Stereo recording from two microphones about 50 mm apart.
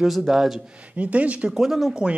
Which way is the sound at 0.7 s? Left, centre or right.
Right.